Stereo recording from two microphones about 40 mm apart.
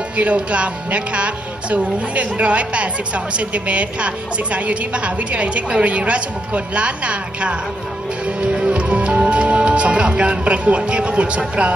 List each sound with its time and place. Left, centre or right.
0.2 s a woman's voice: right